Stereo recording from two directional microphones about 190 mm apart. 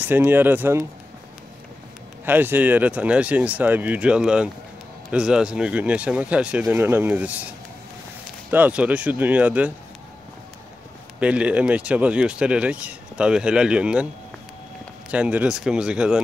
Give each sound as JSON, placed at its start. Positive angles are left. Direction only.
{"t": 0.0, "sound": "speech", "side_deg": -10}
{"t": 2.2, "sound": "speech", "side_deg": -10}
{"t": 8.5, "sound": "speech", "side_deg": -10}
{"t": 11.1, "sound": "speech", "side_deg": -5}
{"t": 15.0, "sound": "speech", "side_deg": -5}